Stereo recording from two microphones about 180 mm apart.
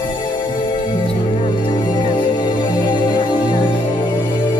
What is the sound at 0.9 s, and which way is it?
Music, 25° left (ahead or behind).